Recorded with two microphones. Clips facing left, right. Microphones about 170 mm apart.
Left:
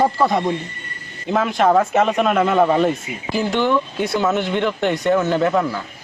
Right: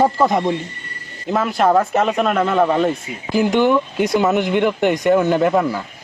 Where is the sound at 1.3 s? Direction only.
Centre (ahead or behind).